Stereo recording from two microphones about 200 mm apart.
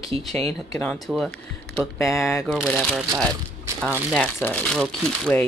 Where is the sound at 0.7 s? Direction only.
5° left (ahead or behind).